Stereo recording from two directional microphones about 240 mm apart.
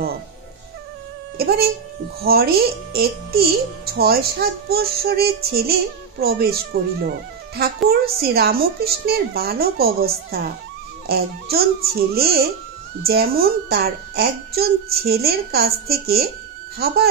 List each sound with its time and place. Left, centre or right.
1.4 s speech: right